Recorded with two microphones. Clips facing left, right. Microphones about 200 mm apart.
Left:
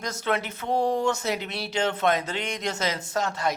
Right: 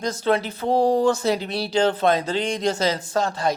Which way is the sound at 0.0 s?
30° right (ahead or behind).